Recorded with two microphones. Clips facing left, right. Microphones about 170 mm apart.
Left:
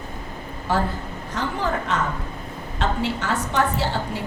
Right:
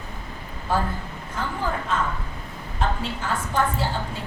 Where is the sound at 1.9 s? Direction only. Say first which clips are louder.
Right 1 dB; 75° left (ahead or behind).